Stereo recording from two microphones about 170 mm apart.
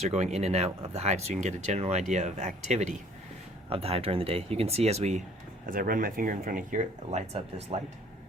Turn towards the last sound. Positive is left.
turn(degrees=-35)  # may be behind; listen again after turning